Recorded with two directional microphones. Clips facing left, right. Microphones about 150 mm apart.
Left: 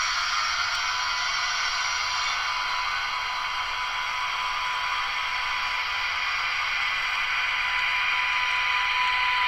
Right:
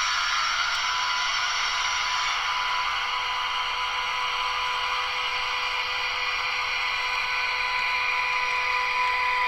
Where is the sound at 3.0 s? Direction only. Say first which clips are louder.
Right 2 dB; 20° right (ahead or behind).